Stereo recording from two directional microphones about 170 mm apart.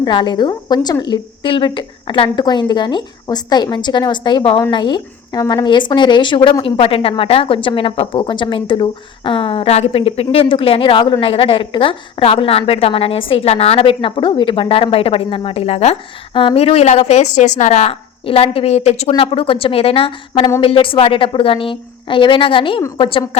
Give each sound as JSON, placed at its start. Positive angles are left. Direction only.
{"t": 0.0, "sound": "a woman's voice", "side_deg": 25}